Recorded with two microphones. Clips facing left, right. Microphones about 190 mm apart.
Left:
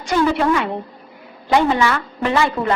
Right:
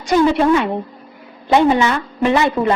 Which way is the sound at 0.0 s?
20° right (ahead or behind).